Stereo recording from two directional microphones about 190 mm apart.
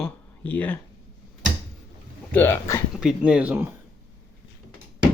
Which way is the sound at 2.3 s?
10° left (ahead or behind).